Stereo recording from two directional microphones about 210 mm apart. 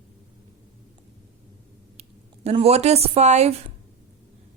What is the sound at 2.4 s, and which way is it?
A woman's voice, 30° right (ahead or behind).